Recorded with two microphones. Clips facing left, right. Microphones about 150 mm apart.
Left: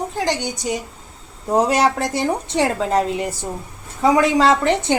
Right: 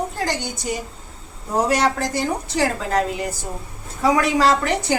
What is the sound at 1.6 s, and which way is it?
A woman's voice, 20° left (ahead or behind).